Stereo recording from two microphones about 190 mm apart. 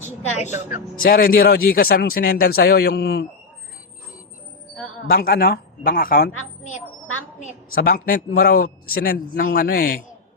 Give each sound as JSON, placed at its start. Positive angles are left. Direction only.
{"t": 0.5, "sound": "speech", "side_deg": 45}
{"t": 5.0, "sound": "speech", "side_deg": 50}